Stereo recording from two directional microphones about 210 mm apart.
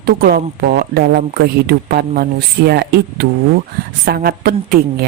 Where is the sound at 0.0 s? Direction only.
45° right (ahead or behind).